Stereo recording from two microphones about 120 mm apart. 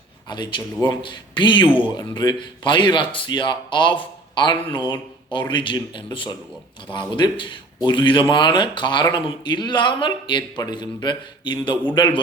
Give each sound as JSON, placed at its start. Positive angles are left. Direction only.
{"t": 0.3, "sound": "speech", "side_deg": 40}